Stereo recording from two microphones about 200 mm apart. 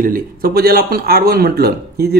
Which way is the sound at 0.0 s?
45° right (ahead or behind).